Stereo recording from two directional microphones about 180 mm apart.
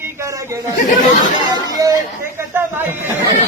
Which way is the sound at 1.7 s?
20° right (ahead or behind).